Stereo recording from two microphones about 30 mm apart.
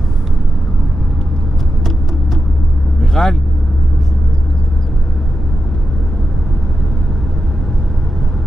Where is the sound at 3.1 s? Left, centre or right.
Centre.